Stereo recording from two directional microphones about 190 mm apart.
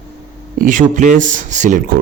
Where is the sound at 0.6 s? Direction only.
40° right (ahead or behind).